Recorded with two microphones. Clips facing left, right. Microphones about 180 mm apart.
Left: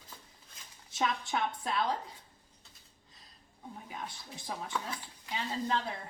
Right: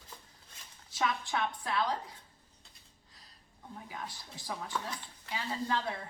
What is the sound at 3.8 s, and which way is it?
Speech, 25° left (ahead or behind).